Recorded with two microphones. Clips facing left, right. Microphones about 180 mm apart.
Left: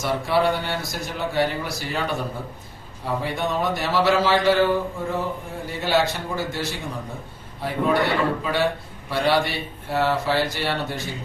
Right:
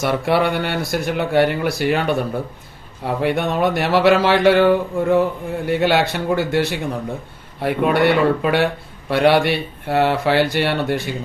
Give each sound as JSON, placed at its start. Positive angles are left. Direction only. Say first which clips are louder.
{"t": 0.0, "sound": "speech", "louder": "right 4 dB", "side_deg": -65}